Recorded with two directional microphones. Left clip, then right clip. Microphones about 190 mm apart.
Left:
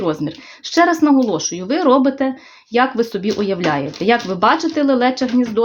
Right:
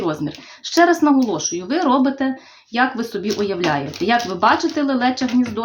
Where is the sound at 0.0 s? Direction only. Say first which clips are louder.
Left 3 dB; 25° left (ahead or behind).